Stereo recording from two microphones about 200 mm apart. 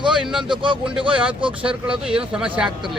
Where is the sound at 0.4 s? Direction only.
25° right (ahead or behind).